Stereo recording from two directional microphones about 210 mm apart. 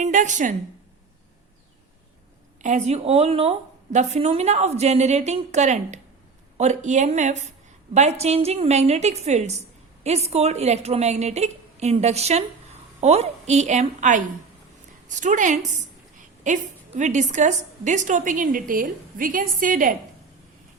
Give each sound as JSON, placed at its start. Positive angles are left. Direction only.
{"t": 0.0, "sound": "a woman's voice", "side_deg": -35}
{"t": 2.6, "sound": "speech", "side_deg": -35}
{"t": 17.0, "sound": "speech", "side_deg": -35}